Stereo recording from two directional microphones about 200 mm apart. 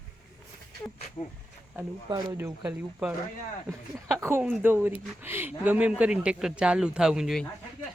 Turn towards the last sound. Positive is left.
turn(degrees=0)  # may be behind; listen again after turning